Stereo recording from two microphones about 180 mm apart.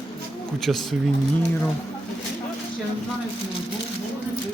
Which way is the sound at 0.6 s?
Centre (ahead or behind).